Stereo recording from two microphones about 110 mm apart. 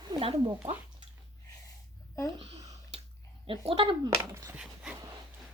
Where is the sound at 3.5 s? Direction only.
55° right (ahead or behind).